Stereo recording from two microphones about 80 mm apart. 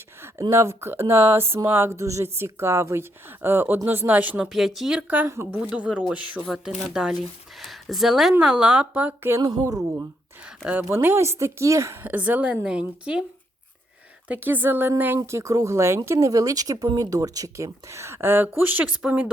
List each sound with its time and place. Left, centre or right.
0.5 s speech: right
4.4 s speech: centre
4.9 s speech: right
6.4 s speech: centre
9.4 s speech: right
10.4 s speech: centre
10.8 s speech: right
12.0 s speech: right
14.3 s speech: right